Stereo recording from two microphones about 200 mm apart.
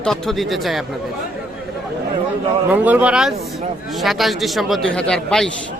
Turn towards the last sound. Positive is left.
turn(degrees=5)  # may be behind; listen again after turning